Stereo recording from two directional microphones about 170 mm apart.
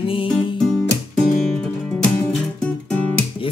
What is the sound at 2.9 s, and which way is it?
Guitar, 5° left (ahead or behind).